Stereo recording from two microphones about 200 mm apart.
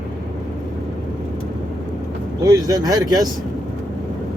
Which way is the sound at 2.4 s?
20° right (ahead or behind).